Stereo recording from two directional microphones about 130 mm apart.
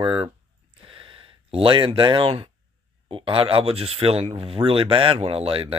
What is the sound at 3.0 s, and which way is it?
Speech, 45° right (ahead or behind).